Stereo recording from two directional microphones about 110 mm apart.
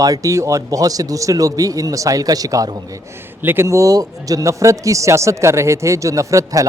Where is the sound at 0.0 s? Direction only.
30° right (ahead or behind).